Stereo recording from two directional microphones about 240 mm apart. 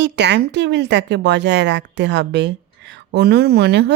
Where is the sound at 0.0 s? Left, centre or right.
Right.